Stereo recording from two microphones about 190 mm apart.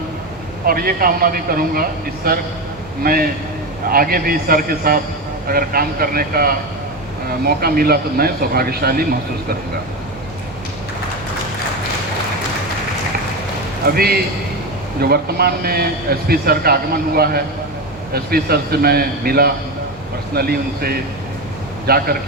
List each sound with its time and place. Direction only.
0.6 s speech: 50° right (ahead or behind)
13.8 s a man's voice: 55° right (ahead or behind)